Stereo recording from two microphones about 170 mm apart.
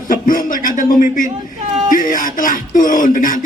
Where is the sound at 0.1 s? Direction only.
55° left (ahead or behind).